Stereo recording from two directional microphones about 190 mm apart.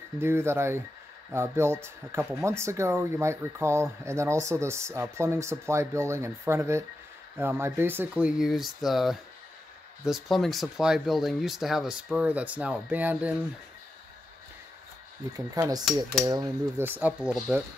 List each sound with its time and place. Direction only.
0.2 s speech: 15° right (ahead or behind)
15.3 s speech: 20° right (ahead or behind)